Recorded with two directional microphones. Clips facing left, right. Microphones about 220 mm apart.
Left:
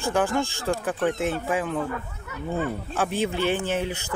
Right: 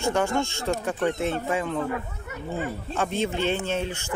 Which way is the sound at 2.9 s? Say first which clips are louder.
Right 1 dB; 5° left (ahead or behind).